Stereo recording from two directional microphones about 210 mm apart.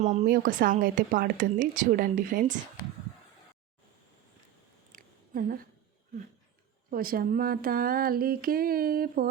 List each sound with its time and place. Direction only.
0.0 s speech: 35° right (ahead or behind)
4.9 s a sound: 40° right (ahead or behind)
6.9 s speech: 45° right (ahead or behind)